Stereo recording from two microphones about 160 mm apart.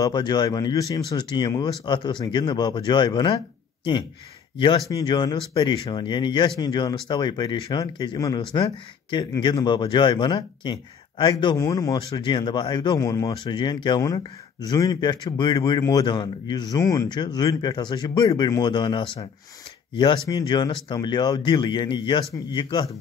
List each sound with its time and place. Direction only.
0.0 s speech: 25° left (ahead or behind)